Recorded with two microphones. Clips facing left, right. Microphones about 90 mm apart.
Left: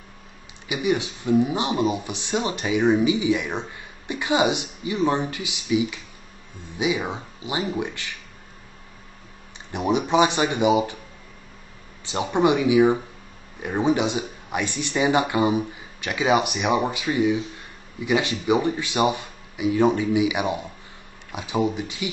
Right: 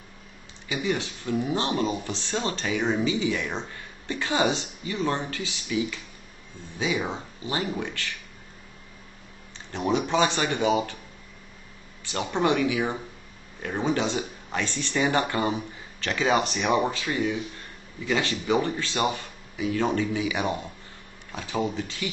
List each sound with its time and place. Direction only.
0.7 s a man's voice: 15° left (ahead or behind)
9.7 s a man's voice: 15° left (ahead or behind)
12.0 s a man's voice: 15° left (ahead or behind)